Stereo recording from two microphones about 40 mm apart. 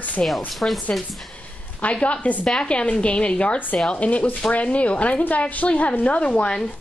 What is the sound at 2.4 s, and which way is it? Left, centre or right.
Speech, centre.